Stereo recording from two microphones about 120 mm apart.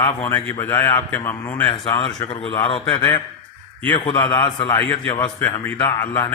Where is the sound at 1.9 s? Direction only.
45° left (ahead or behind).